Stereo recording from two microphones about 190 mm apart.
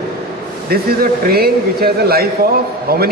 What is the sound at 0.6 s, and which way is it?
A man's voice, 50° right (ahead or behind).